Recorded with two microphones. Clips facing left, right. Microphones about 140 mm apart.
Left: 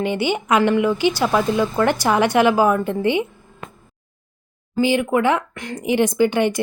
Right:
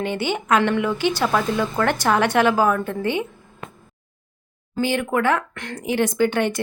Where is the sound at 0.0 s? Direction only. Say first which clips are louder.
Left 3 dB; 10° left (ahead or behind).